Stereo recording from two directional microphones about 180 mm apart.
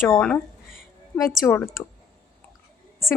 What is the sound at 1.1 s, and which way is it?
Speech, 15° left (ahead or behind).